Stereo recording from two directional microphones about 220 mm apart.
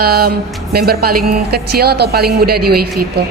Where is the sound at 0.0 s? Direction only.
45° right (ahead or behind).